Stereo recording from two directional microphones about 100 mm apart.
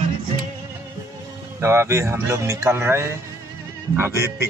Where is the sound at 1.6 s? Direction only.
25° right (ahead or behind).